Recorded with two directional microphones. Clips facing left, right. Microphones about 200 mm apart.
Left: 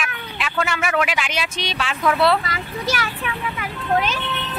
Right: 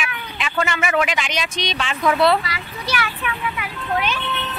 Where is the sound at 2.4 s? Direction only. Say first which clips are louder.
Left 3 dB; 45° left (ahead or behind).